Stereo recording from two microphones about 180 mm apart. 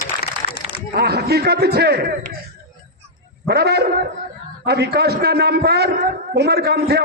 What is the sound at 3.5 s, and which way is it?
A man's voice, 60° right (ahead or behind).